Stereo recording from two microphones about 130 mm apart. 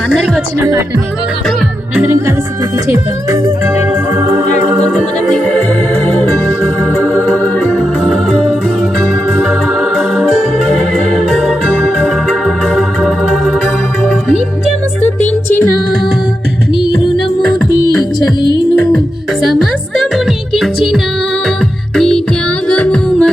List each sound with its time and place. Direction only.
2.0 s music: 20° right (ahead or behind)
7.3 s organ: 15° left (ahead or behind)
11.3 s music: 5° right (ahead or behind)
13.0 s organ: centre (ahead or behind)
20.0 s music: centre (ahead or behind)